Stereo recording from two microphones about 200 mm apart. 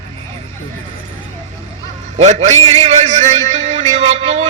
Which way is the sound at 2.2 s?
35° right (ahead or behind).